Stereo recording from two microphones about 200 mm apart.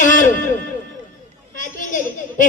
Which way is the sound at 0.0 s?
40° left (ahead or behind).